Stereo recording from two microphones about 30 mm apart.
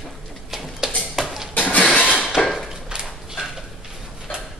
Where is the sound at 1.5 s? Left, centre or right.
Left.